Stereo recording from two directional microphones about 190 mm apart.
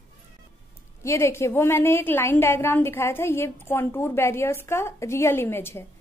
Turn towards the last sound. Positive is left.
turn(degrees=10)  # may be behind; listen again after turning